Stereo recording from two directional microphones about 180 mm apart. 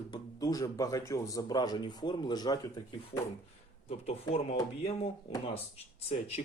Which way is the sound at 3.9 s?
35° left (ahead or behind).